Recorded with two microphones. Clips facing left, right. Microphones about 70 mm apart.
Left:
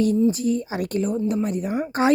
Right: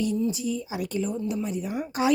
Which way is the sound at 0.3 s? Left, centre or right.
Left.